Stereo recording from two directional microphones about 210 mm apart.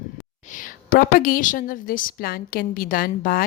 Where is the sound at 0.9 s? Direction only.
40° left (ahead or behind).